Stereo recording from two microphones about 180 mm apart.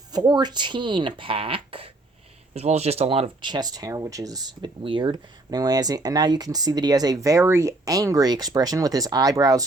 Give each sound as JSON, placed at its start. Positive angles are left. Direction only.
{"t": 0.1, "sound": "speech", "side_deg": -20}